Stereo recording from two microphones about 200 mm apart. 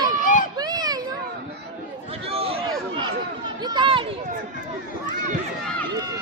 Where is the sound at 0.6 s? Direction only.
20° right (ahead or behind).